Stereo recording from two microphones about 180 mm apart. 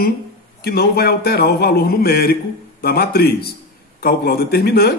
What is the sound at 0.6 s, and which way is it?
Speech, 60° left (ahead or behind).